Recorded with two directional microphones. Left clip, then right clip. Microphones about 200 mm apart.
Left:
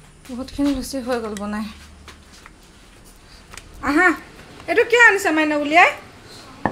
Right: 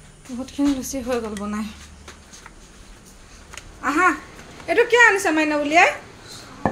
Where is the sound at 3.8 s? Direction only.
20° left (ahead or behind).